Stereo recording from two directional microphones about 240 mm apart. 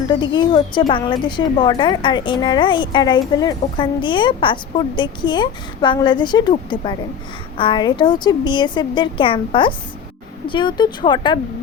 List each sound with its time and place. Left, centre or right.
0.1 s speech: centre